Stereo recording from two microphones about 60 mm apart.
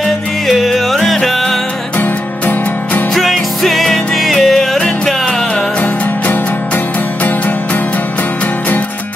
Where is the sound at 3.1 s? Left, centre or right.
Centre.